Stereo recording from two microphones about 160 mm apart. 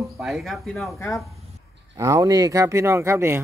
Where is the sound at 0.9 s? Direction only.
15° left (ahead or behind).